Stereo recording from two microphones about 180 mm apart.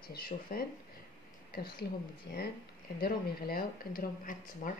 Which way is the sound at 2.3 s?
65° left (ahead or behind).